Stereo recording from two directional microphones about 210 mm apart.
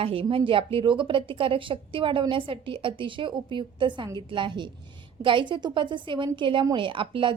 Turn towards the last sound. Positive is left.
turn(degrees=-25)  # may be behind; listen again after turning